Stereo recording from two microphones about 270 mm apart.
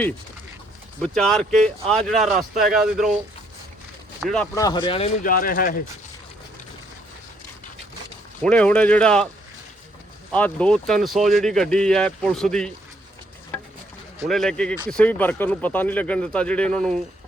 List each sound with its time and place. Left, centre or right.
1.0 s speech: centre
4.2 s speech: centre; by 5.8 s left
8.4 s speech: centre
10.3 s speech: centre
14.3 s speech: centre